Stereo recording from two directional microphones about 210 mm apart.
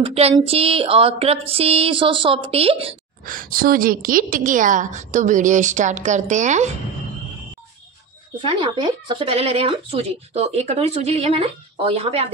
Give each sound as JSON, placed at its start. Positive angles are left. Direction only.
{"t": 0.0, "sound": "speech", "side_deg": -30}
{"t": 3.3, "sound": "a woman's voice", "side_deg": -40}
{"t": 8.4, "sound": "speech", "side_deg": -25}